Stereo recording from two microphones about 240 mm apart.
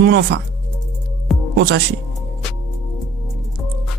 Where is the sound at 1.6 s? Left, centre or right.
Right.